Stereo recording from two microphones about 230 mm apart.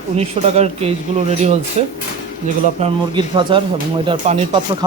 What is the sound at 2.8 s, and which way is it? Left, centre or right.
Speech, right.